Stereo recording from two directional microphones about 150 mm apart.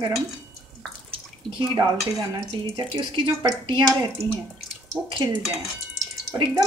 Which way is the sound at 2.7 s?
35° right (ahead or behind).